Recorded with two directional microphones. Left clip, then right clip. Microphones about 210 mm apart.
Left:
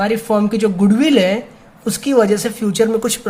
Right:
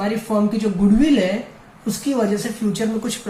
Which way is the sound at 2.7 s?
50° left (ahead or behind).